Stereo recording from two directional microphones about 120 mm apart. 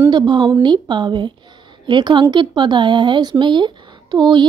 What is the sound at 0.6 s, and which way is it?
Speech, 40° right (ahead or behind).